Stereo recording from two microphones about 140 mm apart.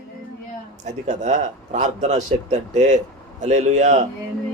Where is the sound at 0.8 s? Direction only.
60° right (ahead or behind).